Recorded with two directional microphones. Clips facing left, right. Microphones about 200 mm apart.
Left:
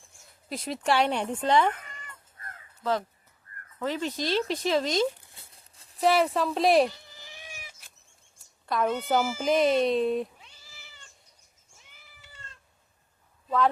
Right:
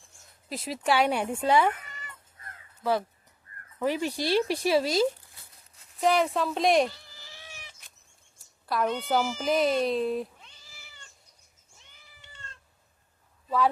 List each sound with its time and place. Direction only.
0.4 s speech: 5° right (ahead or behind)
3.8 s speech: 10° right (ahead or behind)
5.2 s a sound: 25° left (ahead or behind)
6.0 s speech: centre (ahead or behind)
6.8 s cat: 20° left (ahead or behind)
8.6 s speech: centre (ahead or behind)
11.8 s cat: 5° left (ahead or behind)